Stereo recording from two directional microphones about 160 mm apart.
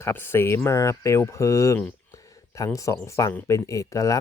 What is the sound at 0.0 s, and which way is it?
Speech, 15° left (ahead or behind).